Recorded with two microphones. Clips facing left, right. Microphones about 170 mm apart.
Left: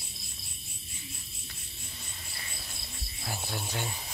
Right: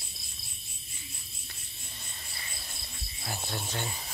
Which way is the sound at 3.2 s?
5° left (ahead or behind).